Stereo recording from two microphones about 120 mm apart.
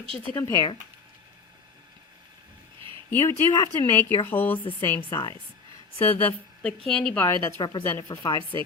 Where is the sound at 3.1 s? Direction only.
20° left (ahead or behind).